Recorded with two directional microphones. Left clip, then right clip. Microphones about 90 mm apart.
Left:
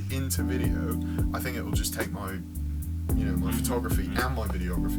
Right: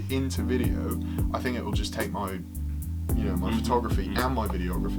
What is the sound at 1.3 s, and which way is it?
Speech, 30° left (ahead or behind).